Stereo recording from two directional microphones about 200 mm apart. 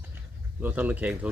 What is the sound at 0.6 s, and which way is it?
Speech, 10° right (ahead or behind).